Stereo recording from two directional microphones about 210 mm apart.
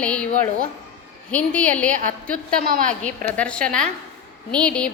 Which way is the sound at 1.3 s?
5° left (ahead or behind).